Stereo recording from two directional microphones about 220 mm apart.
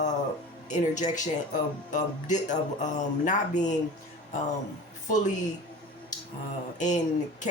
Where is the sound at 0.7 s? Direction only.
35° left (ahead or behind).